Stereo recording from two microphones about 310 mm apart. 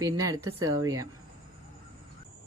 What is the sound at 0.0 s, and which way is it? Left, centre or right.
Speech, centre.